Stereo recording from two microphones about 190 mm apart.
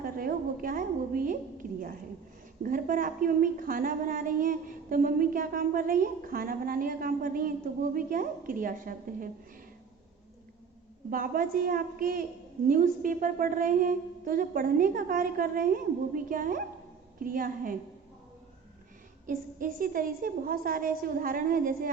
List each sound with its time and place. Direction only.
0.0 s a sound: 50° right (ahead or behind)
2.6 s a woman's voice: 45° right (ahead or behind)
11.1 s a woman's voice: 50° right (ahead or behind)
19.2 s a woman's voice: 45° right (ahead or behind)